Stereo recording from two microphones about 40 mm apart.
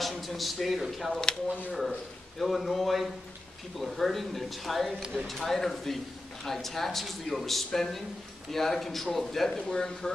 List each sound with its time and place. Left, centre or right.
0.0 s a man's voice: centre
9.7 s speech: left